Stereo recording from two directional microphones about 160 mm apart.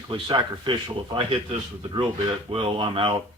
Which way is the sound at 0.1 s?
30° right (ahead or behind).